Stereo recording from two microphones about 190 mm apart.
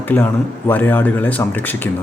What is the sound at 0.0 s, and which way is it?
Speech, 10° left (ahead or behind).